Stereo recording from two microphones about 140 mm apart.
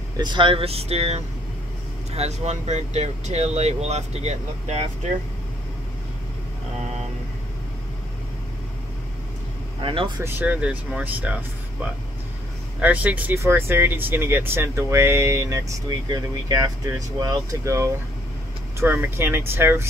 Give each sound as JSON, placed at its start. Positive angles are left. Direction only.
{"t": 0.2, "sound": "speech", "side_deg": -35}
{"t": 9.8, "sound": "speech", "side_deg": -40}
{"t": 10.2, "sound": "speech", "side_deg": -10}
{"t": 12.8, "sound": "speech", "side_deg": -10}